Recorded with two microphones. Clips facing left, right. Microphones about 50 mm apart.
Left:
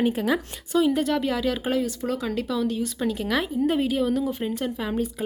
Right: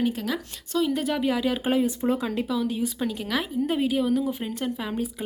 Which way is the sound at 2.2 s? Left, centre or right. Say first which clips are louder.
Left 1 dB; centre.